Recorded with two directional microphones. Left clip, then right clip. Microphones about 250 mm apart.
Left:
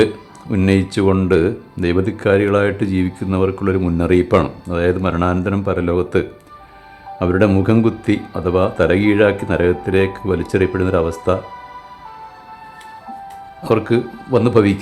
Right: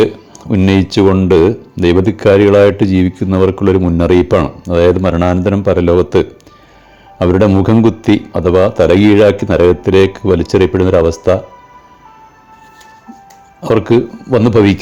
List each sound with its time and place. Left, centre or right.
0.5 s speech: centre
13.6 s speech: centre